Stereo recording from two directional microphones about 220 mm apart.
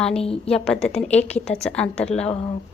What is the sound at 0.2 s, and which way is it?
Speech, 25° left (ahead or behind).